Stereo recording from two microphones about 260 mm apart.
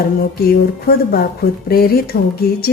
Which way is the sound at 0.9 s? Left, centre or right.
Left.